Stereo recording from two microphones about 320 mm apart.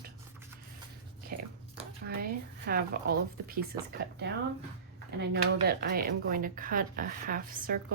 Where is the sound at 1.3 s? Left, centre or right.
Right.